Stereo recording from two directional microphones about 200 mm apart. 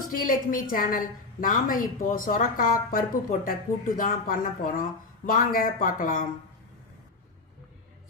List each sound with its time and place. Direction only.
0.1 s a woman's voice: 45° left (ahead or behind)